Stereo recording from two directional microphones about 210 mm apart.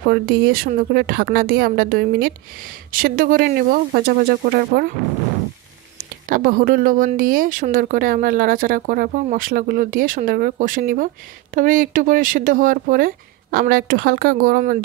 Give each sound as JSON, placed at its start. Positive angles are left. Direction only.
{"t": 0.0, "sound": "a woman's voice", "side_deg": -45}
{"t": 6.2, "sound": "speech", "side_deg": -40}